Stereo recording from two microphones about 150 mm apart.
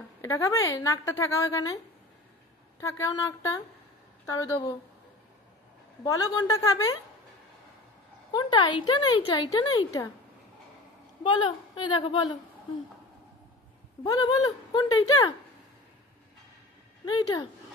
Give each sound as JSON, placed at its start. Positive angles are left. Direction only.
{"t": 0.2, "sound": "a woman's voice", "side_deg": 20}
{"t": 2.8, "sound": "a woman's voice", "side_deg": 20}
{"t": 6.0, "sound": "a woman's voice", "side_deg": 25}
{"t": 8.3, "sound": "a woman's voice", "side_deg": 30}
{"t": 11.2, "sound": "a woman's voice", "side_deg": 30}
{"t": 14.0, "sound": "a woman's voice", "side_deg": 25}
{"t": 17.0, "sound": "a woman's voice", "side_deg": 25}